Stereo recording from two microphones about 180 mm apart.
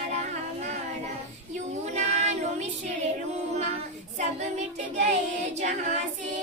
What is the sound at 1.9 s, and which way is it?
Child singing, 40° right (ahead or behind).